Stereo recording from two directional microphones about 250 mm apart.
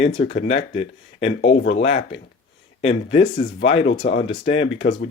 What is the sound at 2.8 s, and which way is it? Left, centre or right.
Speech, left.